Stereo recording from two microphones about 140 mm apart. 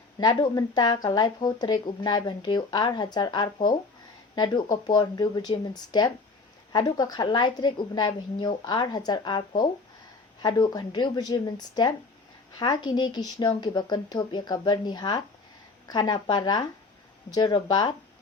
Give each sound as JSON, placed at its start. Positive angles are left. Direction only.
{"t": 0.2, "sound": "speech", "side_deg": 30}